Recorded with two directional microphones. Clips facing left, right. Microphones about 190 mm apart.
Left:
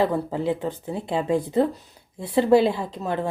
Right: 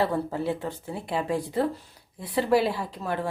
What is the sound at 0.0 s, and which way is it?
Speech, 15° left (ahead or behind).